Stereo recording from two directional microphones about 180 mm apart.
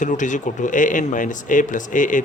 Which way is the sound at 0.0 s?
45° left (ahead or behind).